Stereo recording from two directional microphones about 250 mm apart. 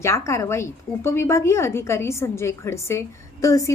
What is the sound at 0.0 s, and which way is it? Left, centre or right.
A woman's voice, centre.